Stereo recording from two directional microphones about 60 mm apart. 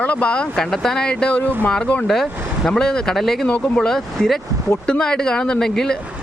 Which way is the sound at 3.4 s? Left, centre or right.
Left.